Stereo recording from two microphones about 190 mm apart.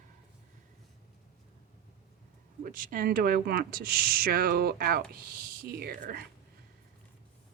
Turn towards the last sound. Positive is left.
turn(degrees=-50)  # may be behind; listen again after turning